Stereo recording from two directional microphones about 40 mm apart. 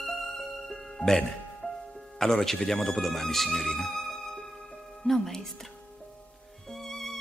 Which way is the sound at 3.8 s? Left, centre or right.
Centre.